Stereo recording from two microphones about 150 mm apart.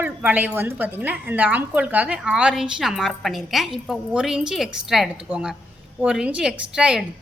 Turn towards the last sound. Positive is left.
turn(degrees=-5)  # may be behind; listen again after turning